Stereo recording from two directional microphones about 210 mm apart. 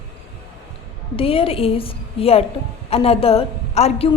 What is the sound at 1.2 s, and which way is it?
A woman's voice, 25° left (ahead or behind).